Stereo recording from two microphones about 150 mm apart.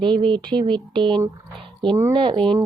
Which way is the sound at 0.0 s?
35° right (ahead or behind).